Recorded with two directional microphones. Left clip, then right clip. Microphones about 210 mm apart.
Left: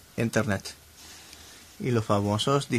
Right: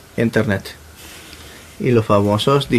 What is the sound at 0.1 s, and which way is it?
Speech, 55° left (ahead or behind).